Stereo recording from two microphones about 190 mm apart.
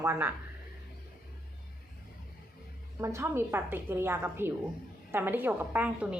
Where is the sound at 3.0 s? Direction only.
15° right (ahead or behind).